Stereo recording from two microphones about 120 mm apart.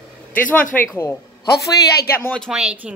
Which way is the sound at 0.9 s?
30° left (ahead or behind).